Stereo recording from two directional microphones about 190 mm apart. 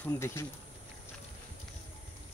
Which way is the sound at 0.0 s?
15° left (ahead or behind).